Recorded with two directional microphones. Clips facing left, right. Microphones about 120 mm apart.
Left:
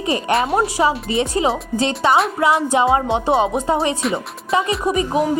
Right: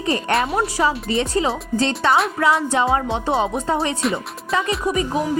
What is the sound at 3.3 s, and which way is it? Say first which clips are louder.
Speech: left 3 dB; 10° left (ahead or behind).